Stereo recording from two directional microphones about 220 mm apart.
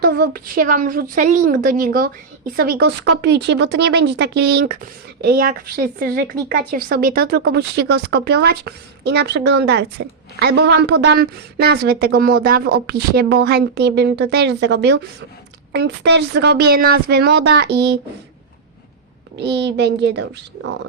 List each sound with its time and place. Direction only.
0.0 s a woman's voice: 45° right (ahead or behind)
19.5 s a woman's voice: 50° right (ahead or behind)